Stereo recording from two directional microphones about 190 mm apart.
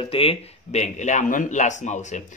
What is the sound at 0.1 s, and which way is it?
A man's voice, 30° left (ahead or behind).